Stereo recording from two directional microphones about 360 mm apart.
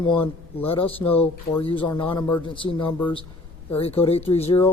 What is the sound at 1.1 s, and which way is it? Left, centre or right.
Speech, centre.